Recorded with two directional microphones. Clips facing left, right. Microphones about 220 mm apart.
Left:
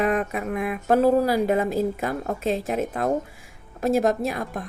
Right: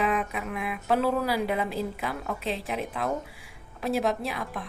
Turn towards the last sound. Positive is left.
turn(degrees=45)  # may be behind; listen again after turning